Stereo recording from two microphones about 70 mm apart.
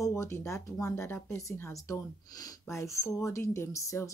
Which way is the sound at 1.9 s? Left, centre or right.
Left.